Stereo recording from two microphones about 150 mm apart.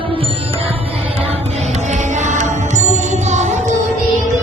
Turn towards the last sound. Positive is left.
turn(degrees=-50)  # may be behind; listen again after turning